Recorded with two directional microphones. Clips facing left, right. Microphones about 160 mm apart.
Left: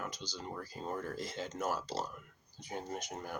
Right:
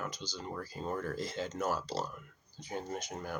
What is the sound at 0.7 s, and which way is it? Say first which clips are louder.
Speech: right 3 dB; 15° left (ahead or behind).